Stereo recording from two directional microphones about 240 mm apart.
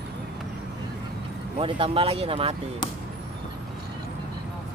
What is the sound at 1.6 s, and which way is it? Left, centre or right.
Speech, right.